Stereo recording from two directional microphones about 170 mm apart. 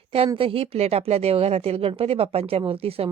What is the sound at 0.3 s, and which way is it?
Speech, 35° right (ahead or behind).